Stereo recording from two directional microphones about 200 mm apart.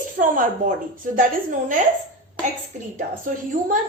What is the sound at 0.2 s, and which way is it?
Speech, 40° right (ahead or behind).